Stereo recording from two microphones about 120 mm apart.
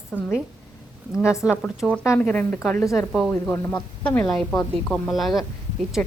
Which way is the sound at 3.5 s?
25° left (ahead or behind).